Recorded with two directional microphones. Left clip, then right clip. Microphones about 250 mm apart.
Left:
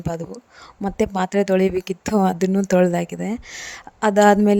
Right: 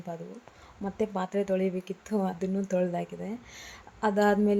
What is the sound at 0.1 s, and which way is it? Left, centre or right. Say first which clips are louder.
Speech: left 11 dB; left.